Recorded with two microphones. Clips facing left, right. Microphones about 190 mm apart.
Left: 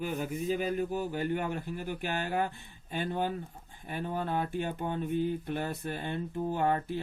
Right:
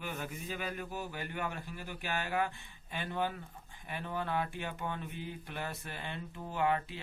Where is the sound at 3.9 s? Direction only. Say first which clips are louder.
Left 4 dB; 40° left (ahead or behind).